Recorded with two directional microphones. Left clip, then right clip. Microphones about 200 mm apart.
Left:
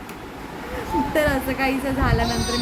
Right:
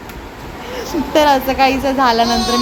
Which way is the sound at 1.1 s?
15° right (ahead or behind).